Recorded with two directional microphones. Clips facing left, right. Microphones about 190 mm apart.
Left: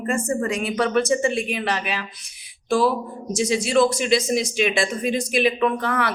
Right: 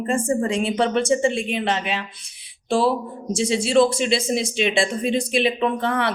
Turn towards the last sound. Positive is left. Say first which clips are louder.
# even
turn(degrees=-25)  # may be behind; listen again after turning